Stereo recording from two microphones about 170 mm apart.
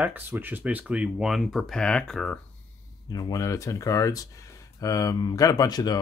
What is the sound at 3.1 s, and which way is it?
Speech, 20° left (ahead or behind).